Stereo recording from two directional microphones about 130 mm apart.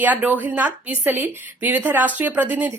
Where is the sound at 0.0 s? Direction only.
10° right (ahead or behind).